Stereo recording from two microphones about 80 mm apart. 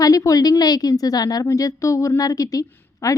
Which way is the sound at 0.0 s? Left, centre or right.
Left.